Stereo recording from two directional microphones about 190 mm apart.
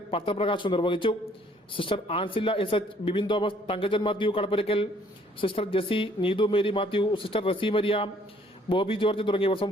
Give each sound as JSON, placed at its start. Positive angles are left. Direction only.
{"t": 0.1, "sound": "speech", "side_deg": 30}